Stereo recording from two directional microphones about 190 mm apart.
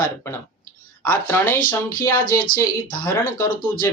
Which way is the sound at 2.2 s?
50° left (ahead or behind).